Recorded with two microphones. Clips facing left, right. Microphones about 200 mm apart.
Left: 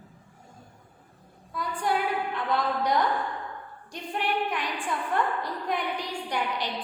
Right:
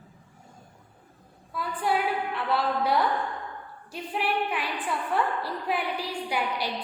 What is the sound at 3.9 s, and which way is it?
A woman's voice, 5° right (ahead or behind).